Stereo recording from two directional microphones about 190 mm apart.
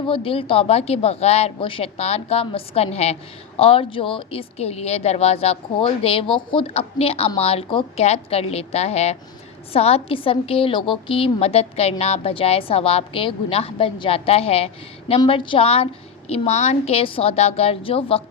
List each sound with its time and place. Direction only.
0.1 s a woman's voice: 30° left (ahead or behind)